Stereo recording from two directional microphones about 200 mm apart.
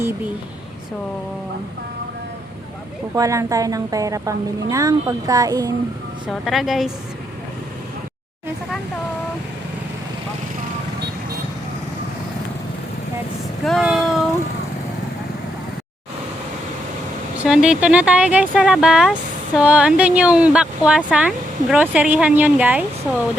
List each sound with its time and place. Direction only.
3.2 s a woman's voice: 15° right (ahead or behind)
6.2 s speech: centre (ahead or behind)
13.7 s a sound: centre (ahead or behind)
17.4 s a woman's voice: 5° right (ahead or behind)